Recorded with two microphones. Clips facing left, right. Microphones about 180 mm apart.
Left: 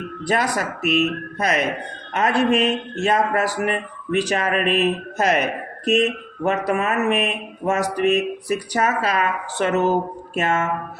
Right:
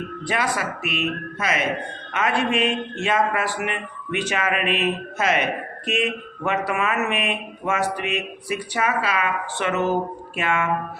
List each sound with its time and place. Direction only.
0.3 s speech: 40° left (ahead or behind)